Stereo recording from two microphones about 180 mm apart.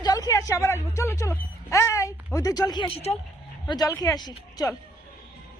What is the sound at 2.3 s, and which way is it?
Speech, 20° left (ahead or behind).